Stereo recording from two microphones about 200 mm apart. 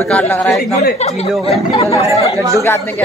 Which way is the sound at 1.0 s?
30° left (ahead or behind).